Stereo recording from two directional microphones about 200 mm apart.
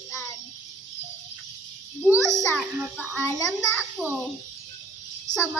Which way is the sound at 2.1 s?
15° left (ahead or behind).